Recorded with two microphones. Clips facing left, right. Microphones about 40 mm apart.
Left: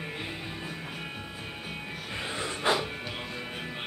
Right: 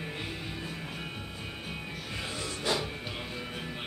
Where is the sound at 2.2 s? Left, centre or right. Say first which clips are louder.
Left 5 dB; left.